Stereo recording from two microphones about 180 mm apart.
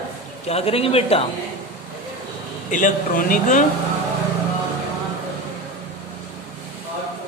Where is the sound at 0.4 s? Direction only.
35° left (ahead or behind).